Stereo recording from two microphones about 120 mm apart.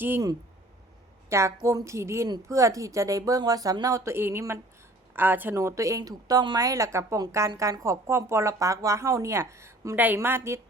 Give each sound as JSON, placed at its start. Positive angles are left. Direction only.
{"t": 1.3, "sound": "a woman's voice", "side_deg": -25}